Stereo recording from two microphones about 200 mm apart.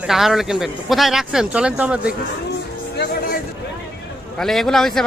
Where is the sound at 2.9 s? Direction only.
55° left (ahead or behind).